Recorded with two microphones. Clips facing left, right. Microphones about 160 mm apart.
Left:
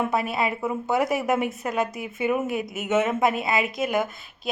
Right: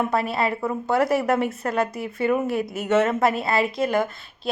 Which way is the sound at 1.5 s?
Centre (ahead or behind).